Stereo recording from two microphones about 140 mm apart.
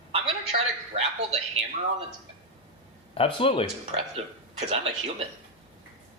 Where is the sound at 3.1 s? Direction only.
40° left (ahead or behind).